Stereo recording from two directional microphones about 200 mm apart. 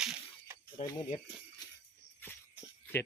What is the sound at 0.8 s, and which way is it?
Speech, 40° left (ahead or behind).